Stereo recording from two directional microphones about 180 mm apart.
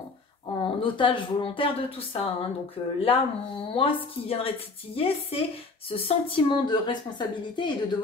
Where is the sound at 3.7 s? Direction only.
30° left (ahead or behind).